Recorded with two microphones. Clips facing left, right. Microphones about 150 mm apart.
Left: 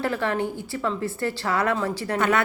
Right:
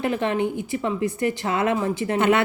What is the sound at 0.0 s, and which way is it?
Speech, 20° right (ahead or behind).